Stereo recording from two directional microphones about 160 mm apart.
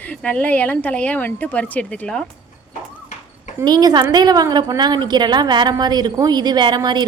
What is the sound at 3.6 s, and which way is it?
A woman's voice, 25° right (ahead or behind).